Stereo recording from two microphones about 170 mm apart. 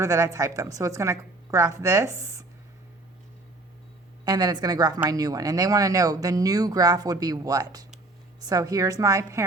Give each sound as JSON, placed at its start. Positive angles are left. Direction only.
{"t": 0.0, "sound": "speech", "side_deg": -20}
{"t": 4.3, "sound": "speech", "side_deg": -25}